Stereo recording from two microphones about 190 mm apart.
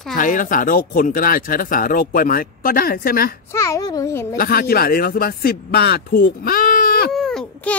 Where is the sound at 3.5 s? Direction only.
15° left (ahead or behind).